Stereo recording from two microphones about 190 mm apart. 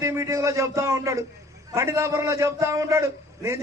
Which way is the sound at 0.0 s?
15° right (ahead or behind).